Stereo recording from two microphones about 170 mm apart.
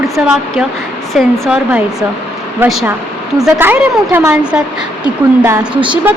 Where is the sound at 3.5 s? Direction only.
10° right (ahead or behind).